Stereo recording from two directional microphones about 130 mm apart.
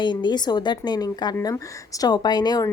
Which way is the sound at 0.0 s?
35° left (ahead or behind).